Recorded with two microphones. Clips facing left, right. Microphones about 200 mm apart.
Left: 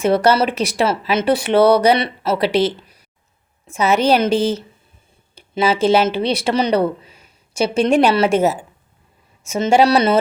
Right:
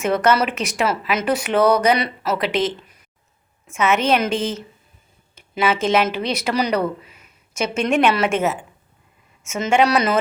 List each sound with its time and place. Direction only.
0.0 s speech: 35° left (ahead or behind)